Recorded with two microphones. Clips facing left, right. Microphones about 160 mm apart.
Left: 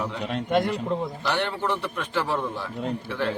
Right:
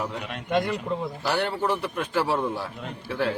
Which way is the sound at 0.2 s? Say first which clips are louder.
Left 4 dB; 35° left (ahead or behind).